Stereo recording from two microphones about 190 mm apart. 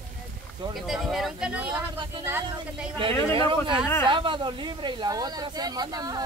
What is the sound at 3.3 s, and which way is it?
Speech, 25° right (ahead or behind).